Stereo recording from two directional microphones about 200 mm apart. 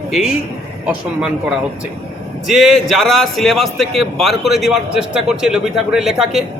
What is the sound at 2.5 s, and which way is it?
A man's voice, centre (ahead or behind).